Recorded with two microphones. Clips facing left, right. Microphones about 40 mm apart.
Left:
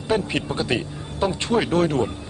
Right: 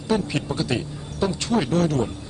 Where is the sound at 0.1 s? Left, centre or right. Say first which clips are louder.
Left 1 dB; left.